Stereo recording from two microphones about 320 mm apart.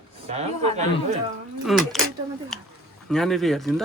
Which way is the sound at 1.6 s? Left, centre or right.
Centre.